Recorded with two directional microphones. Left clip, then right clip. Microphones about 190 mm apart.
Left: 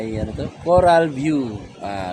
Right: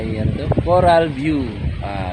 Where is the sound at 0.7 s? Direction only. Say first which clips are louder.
Even; centre (ahead or behind).